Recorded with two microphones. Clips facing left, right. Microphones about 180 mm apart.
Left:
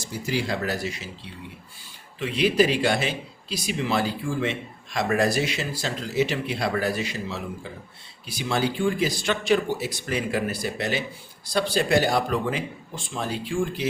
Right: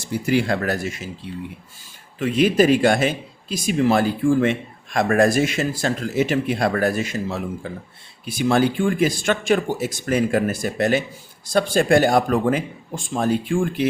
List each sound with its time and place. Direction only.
0.1 s speech: 55° right (ahead or behind)
2.1 s speech: 50° right (ahead or behind)